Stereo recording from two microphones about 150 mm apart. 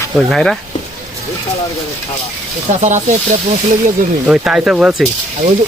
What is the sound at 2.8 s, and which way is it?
Speech, 55° right (ahead or behind).